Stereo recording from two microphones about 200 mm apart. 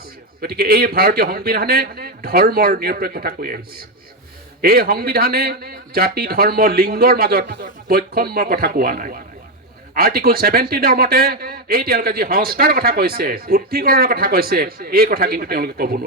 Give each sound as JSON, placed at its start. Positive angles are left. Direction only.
{"t": 0.4, "sound": "a man's voice", "side_deg": -50}